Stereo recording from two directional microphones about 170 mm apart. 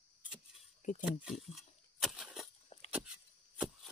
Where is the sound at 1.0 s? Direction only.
5° right (ahead or behind).